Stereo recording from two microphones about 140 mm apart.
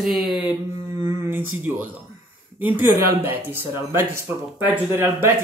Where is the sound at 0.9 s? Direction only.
15° right (ahead or behind).